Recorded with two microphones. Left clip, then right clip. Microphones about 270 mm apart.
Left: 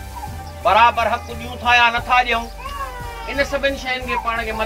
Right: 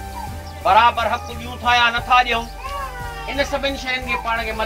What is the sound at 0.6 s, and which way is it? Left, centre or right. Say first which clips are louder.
A man's voice: left 1 dB; centre.